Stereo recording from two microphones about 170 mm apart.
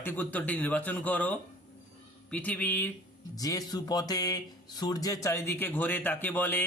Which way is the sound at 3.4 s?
20° left (ahead or behind).